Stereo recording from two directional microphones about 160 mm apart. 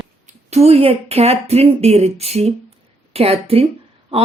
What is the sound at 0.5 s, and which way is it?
Speech, 40° right (ahead or behind).